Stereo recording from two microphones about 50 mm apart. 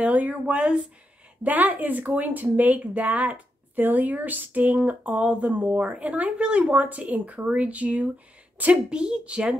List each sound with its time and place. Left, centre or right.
0.0 s speech: right
8.9 s speech: right